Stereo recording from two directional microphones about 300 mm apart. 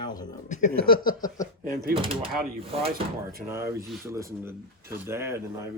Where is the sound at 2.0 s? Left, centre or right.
Centre.